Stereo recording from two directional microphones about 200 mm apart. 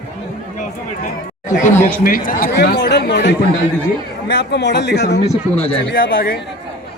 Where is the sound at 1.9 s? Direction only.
45° left (ahead or behind).